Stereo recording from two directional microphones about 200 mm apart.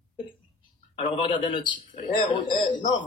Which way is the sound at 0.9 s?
25° left (ahead or behind).